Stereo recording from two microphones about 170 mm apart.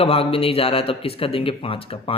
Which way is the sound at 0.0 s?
35° left (ahead or behind).